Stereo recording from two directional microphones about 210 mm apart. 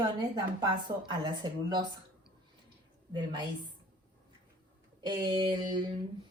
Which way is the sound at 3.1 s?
20° right (ahead or behind).